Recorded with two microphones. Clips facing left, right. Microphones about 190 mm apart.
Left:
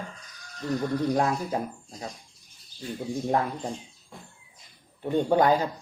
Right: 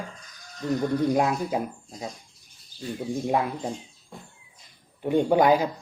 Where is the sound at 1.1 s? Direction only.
10° right (ahead or behind).